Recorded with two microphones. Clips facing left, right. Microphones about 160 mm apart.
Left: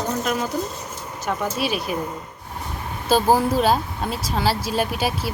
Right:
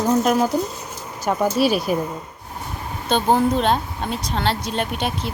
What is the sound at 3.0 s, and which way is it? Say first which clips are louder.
Speech: even; 5° left (ahead or behind).